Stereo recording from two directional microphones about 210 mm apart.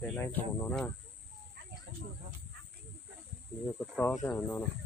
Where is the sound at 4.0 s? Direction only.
10° left (ahead or behind).